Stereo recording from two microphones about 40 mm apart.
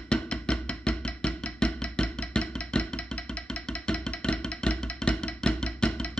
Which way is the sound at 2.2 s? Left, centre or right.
Left.